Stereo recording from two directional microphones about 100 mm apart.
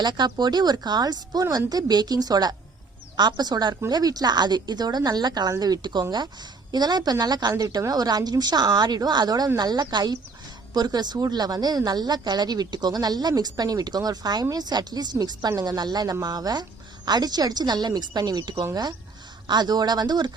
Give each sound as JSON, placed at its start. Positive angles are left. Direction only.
{"t": 0.0, "sound": "speech", "side_deg": -45}